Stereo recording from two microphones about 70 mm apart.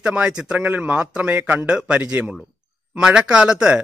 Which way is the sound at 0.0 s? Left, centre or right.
Centre.